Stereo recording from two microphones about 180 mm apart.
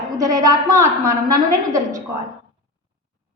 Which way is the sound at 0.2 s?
20° right (ahead or behind).